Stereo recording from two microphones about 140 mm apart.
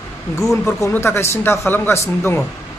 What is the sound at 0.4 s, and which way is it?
A man's voice, 20° left (ahead or behind).